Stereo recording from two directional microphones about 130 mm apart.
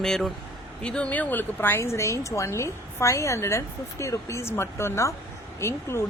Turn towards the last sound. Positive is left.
turn(degrees=20)  # may be behind; listen again after turning